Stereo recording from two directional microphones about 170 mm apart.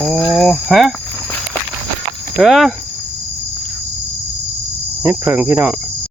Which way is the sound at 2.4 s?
Centre (ahead or behind).